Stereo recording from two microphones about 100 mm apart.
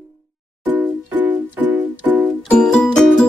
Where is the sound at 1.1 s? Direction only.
15° right (ahead or behind).